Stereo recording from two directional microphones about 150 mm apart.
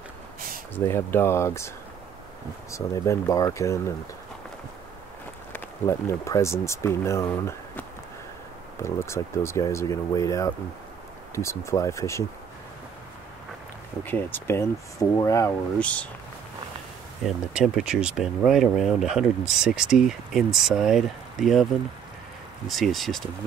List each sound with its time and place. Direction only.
0.7 s speech: 15° left (ahead or behind)
2.7 s speech: 20° left (ahead or behind)
5.5 s speech: 20° left (ahead or behind)
8.8 s speech: 20° left (ahead or behind)
14.0 s speech: 15° left (ahead or behind)
15.8 s speech: 10° left (ahead or behind)
17.2 s speech: centre (ahead or behind)
22.7 s speech: centre (ahead or behind)